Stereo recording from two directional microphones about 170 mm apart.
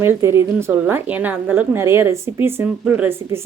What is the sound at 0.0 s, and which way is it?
A woman's voice, 15° right (ahead or behind).